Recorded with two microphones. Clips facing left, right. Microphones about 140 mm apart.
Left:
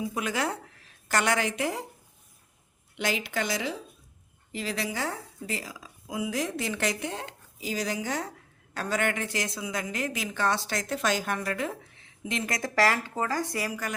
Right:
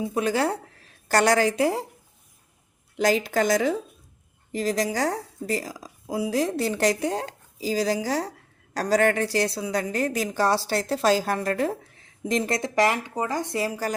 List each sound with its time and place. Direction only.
0.0 s a woman's voice: 35° right (ahead or behind)
2.9 s a woman's voice: 40° right (ahead or behind)
12.5 s a woman's voice: 25° right (ahead or behind)